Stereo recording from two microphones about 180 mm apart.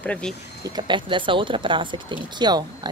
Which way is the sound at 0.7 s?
25° right (ahead or behind).